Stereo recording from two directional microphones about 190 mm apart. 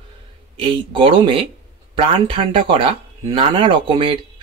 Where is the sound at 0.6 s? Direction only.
25° right (ahead or behind).